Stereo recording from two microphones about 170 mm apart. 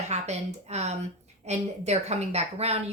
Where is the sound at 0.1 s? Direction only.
40° right (ahead or behind).